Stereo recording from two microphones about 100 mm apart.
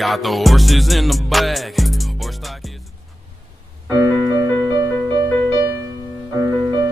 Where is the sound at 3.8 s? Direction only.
40° right (ahead or behind).